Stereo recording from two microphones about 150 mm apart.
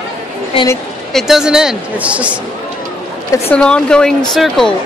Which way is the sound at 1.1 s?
Centre (ahead or behind).